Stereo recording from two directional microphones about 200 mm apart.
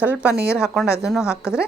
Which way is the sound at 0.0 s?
5° right (ahead or behind).